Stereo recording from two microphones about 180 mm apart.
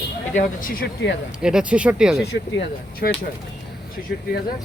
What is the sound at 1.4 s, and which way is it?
Speech, 5° right (ahead or behind).